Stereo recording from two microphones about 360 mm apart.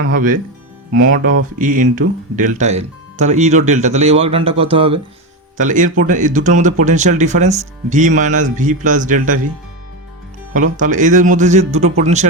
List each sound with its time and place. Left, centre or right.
0.0 s speech: right
10.5 s speech: right